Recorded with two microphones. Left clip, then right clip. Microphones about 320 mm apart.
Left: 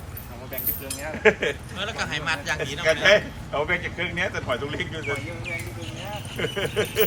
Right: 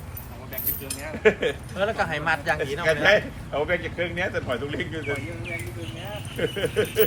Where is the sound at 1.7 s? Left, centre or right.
Right.